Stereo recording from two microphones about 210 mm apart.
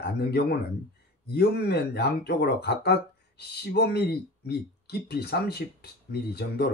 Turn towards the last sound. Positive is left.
turn(degrees=50)  # may be behind; listen again after turning